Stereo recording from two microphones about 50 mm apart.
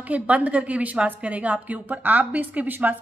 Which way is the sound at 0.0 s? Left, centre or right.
Right.